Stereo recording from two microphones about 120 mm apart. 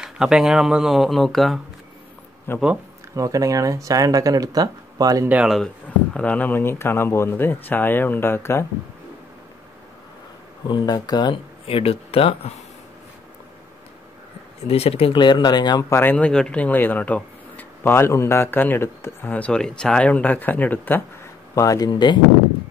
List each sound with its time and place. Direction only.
0.0 s speech: 5° right (ahead or behind)
2.5 s speech: 20° left (ahead or behind)
3.2 s speech: 30° right (ahead or behind)
5.3 s speech: 5° right (ahead or behind)
6.1 s speech: 10° left (ahead or behind)
10.7 s speech: 35° left (ahead or behind)
11.6 s speech: 55° left (ahead or behind)
14.6 s speech: 60° left (ahead or behind); by 15.8 s 35° left (ahead or behind)
15.8 s speech: 20° left (ahead or behind)
21.5 s speech: 30° left (ahead or behind)